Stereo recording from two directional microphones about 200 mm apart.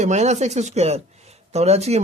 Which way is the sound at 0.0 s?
35° right (ahead or behind).